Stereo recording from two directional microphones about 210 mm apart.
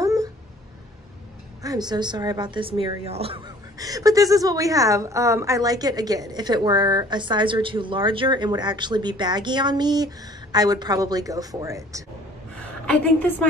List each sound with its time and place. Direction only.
0.0 s a sound: 15° right (ahead or behind)
1.6 s a woman's voice: 20° right (ahead or behind)
12.5 s a woman's voice: 5° left (ahead or behind)